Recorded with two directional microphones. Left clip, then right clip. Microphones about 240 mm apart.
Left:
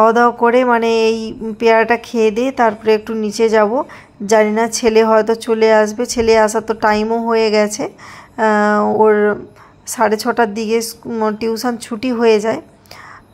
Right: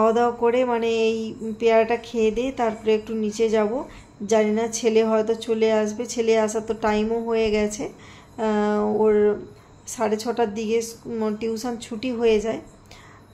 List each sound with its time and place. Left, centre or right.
0.0 s speech: left